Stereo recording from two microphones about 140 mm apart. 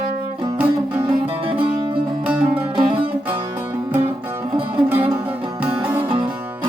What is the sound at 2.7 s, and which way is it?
Music, 40° right (ahead or behind).